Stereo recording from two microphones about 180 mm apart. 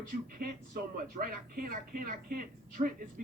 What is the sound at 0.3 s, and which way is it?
Speech, 55° right (ahead or behind).